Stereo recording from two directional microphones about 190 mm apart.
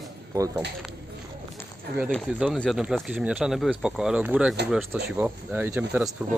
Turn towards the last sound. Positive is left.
turn(degrees=-10)  # may be behind; listen again after turning